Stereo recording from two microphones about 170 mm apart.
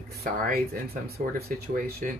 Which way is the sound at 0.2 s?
65° right (ahead or behind).